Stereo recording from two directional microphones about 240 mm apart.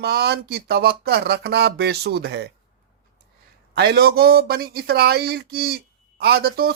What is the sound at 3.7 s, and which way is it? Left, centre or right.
Speech, right.